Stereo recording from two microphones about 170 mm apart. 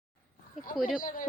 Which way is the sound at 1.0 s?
50° left (ahead or behind).